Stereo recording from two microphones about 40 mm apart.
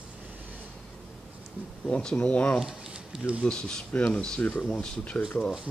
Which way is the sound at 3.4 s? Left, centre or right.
Centre.